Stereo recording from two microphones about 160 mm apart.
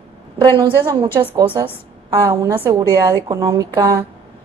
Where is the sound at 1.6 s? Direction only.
15° right (ahead or behind).